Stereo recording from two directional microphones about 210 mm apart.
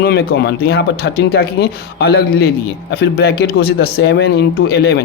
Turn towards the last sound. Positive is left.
turn(degrees=50)  # may be behind; listen again after turning